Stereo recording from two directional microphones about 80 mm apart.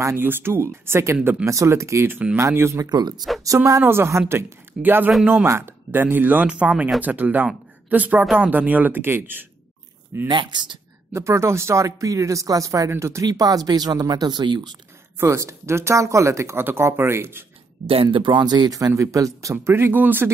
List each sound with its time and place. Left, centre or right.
0.0 s speech: right
2.9 s speech: right
3.8 s speech: right
10.2 s speech: right
11.1 s speech: right
13.3 s speech: right
15.1 s speech: right
18.0 s speech: right